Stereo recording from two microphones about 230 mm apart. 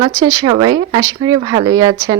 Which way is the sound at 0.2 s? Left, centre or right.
Centre.